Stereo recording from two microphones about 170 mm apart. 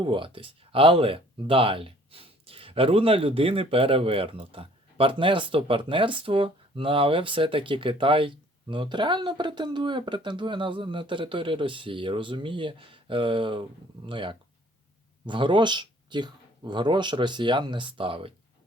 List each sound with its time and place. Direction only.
0.0 s speech: 30° right (ahead or behind)